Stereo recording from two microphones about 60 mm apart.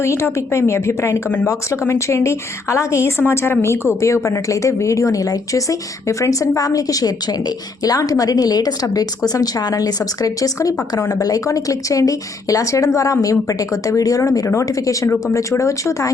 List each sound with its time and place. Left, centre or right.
0.0 s a woman's voice: left
6.6 s a woman's voice: left
11.1 s a woman's voice: left